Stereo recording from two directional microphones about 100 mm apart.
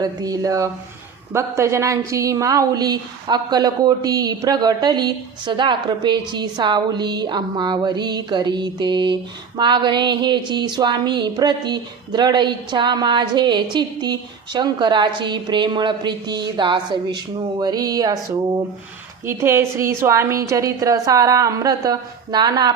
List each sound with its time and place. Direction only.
0.0 s a woman's voice: 40° right (ahead or behind)
1.3 s a sound: 30° right (ahead or behind)
19.2 s a woman's voice: 25° right (ahead or behind); by 22.7 s 40° right (ahead or behind)